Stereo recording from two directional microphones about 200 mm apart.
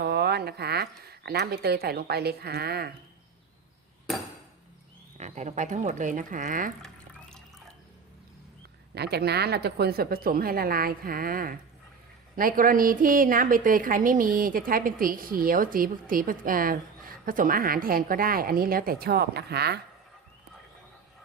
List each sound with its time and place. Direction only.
0.0 s speech: 55° right (ahead or behind)
5.1 s speech: 35° right (ahead or behind)
6.8 s drip: 5° left (ahead or behind)
9.0 s a woman's voice: 55° right (ahead or behind)